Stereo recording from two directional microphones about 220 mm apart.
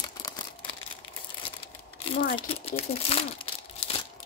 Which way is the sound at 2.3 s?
25° left (ahead or behind).